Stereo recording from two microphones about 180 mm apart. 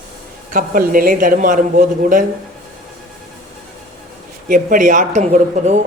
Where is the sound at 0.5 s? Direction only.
50° right (ahead or behind).